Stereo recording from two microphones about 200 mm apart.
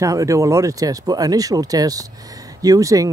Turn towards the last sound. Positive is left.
turn(degrees=-15)  # may be behind; listen again after turning